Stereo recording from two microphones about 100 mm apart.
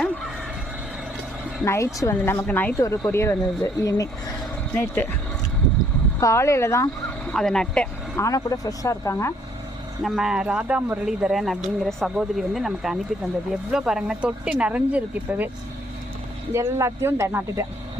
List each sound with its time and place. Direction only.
1.6 s speech: 30° left (ahead or behind)
2.7 s speech: 30° left (ahead or behind)
4.7 s speech: 20° left (ahead or behind)
6.1 s speech: 30° left (ahead or behind)
7.3 s speech: 5° left (ahead or behind)
8.1 s speech: 35° left (ahead or behind)
10.0 s speech: 5° right (ahead or behind)
16.5 s speech: 30° right (ahead or behind)